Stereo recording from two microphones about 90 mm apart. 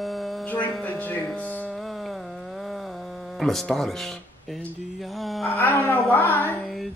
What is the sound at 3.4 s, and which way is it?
Speech, 5° left (ahead or behind).